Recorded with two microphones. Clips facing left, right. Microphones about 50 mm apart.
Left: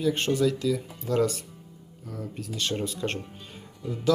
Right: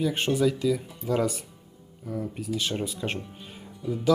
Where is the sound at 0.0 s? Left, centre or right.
Centre.